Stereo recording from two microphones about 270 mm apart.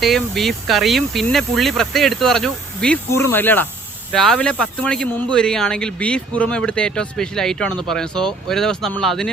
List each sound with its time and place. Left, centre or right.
0.0 s speech: centre